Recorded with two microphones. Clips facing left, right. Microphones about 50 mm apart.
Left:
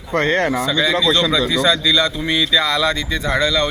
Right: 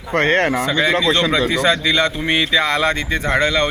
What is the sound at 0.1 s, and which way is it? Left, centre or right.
A man's voice, right.